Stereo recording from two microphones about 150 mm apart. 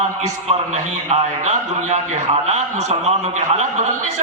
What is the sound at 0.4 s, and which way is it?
A man's voice, 45° right (ahead or behind).